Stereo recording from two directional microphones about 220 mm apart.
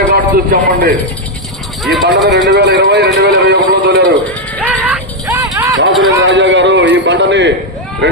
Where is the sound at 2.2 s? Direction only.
50° right (ahead or behind).